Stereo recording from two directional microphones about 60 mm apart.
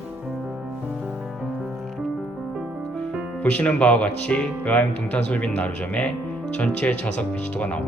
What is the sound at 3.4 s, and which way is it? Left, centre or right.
Speech, left.